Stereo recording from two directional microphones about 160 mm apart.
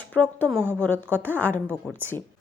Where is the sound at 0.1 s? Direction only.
10° left (ahead or behind).